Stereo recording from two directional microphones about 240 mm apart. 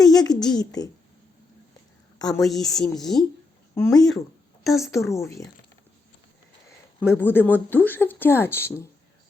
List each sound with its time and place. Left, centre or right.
0.0 s a sound: centre
0.4 s speech: centre
2.1 s a woman's voice: centre
2.4 s a woman's voice: centre
3.8 s speech: centre
6.7 s speech: centre